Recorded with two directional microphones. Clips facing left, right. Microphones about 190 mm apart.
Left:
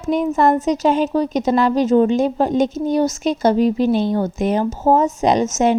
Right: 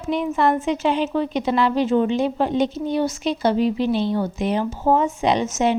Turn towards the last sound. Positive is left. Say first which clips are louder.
# left 4 dB
turn(degrees=45)  # may be behind; listen again after turning